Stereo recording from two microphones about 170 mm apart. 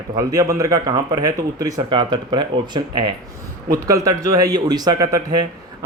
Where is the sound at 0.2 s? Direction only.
20° right (ahead or behind).